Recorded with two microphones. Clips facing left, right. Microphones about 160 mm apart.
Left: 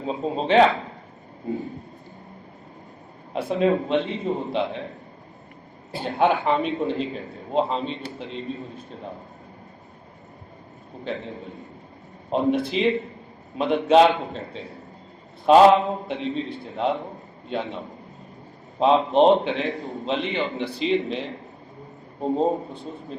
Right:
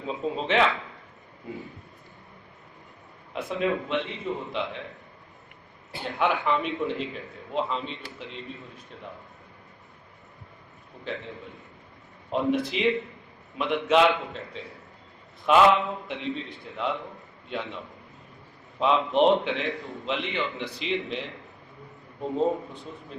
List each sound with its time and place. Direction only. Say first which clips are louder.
0.0 s a man's voice: left 4 dB; 35° left (ahead or behind)
3.3 s a man's voice: left 6 dB; 30° left (ahead or behind)
5.9 s a man's voice: left 5 dB; 35° left (ahead or behind)
11.0 s a man's voice: left 4 dB; 35° left (ahead or behind)